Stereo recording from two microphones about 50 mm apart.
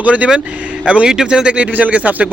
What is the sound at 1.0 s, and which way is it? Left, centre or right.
Speech, centre.